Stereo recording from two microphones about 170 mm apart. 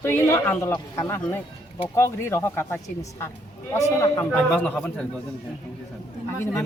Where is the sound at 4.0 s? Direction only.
15° left (ahead or behind).